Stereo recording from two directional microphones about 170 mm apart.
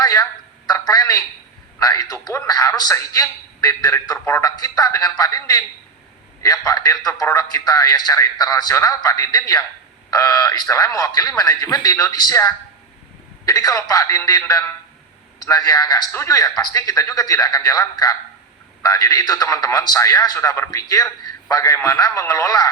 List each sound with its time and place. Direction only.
0.0 s a man's voice: 20° left (ahead or behind)